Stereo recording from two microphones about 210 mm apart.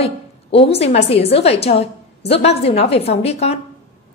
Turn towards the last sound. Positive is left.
turn(degrees=30)  # may be behind; listen again after turning